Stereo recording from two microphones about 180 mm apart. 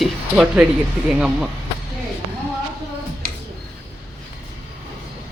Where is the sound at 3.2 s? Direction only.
55° right (ahead or behind).